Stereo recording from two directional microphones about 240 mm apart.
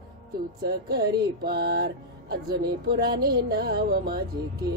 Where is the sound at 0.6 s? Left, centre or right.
Right.